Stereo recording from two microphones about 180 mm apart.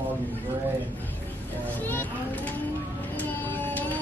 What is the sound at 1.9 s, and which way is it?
Children playing, 10° left (ahead or behind).